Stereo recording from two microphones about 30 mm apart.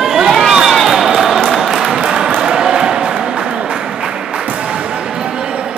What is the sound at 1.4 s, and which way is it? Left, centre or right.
Music, centre.